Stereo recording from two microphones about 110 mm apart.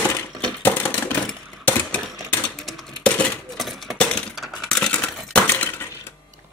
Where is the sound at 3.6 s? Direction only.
Centre (ahead or behind); by 6.2 s 20° left (ahead or behind).